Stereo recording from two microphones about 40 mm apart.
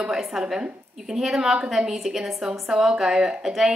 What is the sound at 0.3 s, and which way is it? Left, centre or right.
A woman's voice, centre.